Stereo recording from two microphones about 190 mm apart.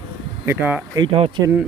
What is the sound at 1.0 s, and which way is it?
Speech, 30° right (ahead or behind).